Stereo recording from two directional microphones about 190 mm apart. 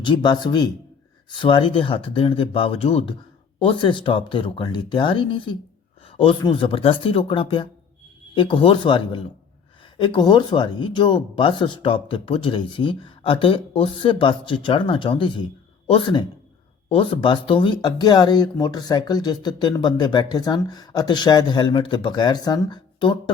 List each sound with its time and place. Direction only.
0.0 s speech: 25° left (ahead or behind)